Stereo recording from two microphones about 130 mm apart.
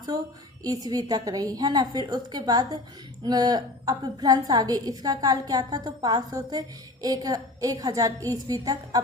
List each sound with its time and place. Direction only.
0.6 s a woman's voice: 30° right (ahead or behind)